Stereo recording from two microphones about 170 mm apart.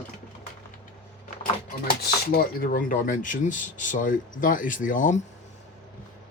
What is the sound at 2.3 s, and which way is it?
Speech, 60° left (ahead or behind).